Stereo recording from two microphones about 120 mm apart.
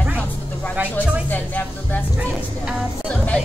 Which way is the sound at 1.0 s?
15° left (ahead or behind).